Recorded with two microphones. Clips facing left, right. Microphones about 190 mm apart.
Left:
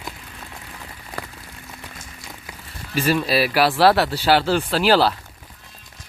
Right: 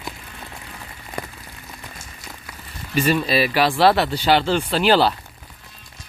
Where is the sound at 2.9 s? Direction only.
5° left (ahead or behind).